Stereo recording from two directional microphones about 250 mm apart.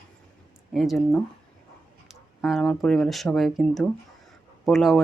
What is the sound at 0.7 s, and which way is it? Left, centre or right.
Speech, centre.